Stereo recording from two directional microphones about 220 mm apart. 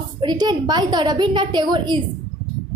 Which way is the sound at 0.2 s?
20° right (ahead or behind).